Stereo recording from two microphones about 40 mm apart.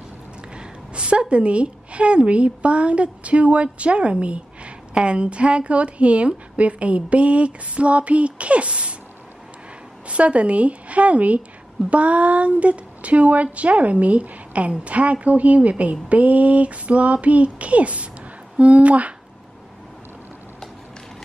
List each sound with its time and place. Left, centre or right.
0.6 s a sound: right
1.3 s a woman's voice: right
10.0 s a woman's voice: right